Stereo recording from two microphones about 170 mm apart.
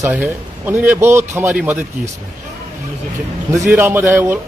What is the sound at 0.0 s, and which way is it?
A man's voice, 10° right (ahead or behind).